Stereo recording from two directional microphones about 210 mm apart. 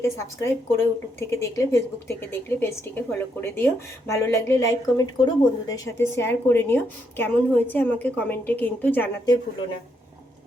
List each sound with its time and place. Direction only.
0.0 s a woman's voice: 15° left (ahead or behind)